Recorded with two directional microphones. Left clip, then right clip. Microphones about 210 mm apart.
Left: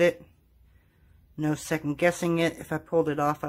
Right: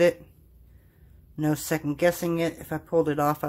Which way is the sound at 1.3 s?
5° left (ahead or behind).